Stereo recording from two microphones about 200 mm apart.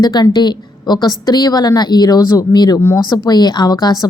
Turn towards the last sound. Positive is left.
turn(degrees=20)  # may be behind; listen again after turning